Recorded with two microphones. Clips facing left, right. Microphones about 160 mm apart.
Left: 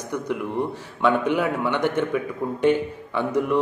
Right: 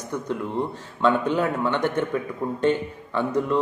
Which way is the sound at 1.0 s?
15° left (ahead or behind).